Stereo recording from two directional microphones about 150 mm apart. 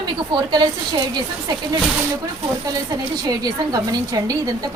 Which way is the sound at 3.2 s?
25° right (ahead or behind).